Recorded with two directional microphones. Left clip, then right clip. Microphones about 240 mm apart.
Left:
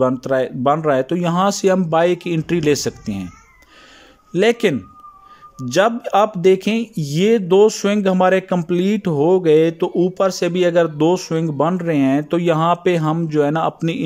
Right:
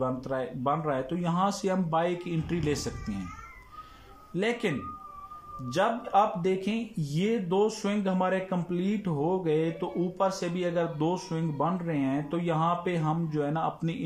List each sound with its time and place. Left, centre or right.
0.0 s speech: left
4.3 s speech: left